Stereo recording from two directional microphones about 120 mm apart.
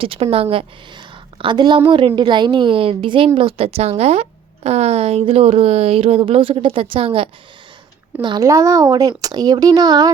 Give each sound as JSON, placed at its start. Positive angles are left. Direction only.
{"t": 0.0, "sound": "a woman's voice", "side_deg": -50}
{"t": 8.4, "sound": "speech", "side_deg": -25}